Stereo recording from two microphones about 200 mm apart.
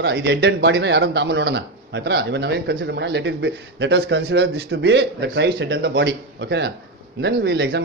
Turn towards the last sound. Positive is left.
turn(degrees=-55)  # may be behind; listen again after turning